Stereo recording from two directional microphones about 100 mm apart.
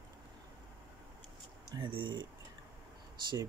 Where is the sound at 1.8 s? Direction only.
55° right (ahead or behind).